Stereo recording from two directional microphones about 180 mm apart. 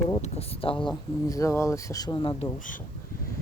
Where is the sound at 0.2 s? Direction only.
35° left (ahead or behind).